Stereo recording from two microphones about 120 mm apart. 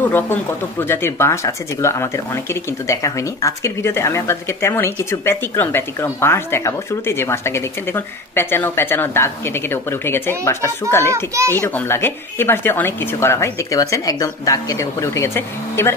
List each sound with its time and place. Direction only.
0.1 s speech: 15° left (ahead or behind)
11.3 s a child's voice: 25° right (ahead or behind)
11.6 s speech: 20° left (ahead or behind)